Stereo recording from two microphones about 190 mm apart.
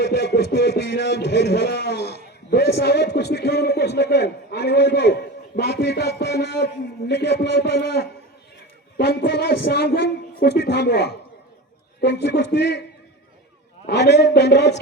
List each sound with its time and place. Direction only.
0.0 s a man's voice: 60° left (ahead or behind)
13.8 s a man's voice: 65° left (ahead or behind)